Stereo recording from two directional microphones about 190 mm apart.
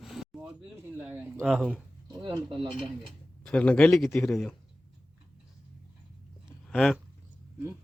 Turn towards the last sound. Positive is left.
turn(degrees=5)  # may be behind; listen again after turning